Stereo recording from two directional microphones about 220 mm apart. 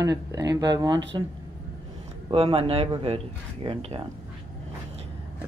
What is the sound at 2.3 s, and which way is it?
Speech, 25° right (ahead or behind).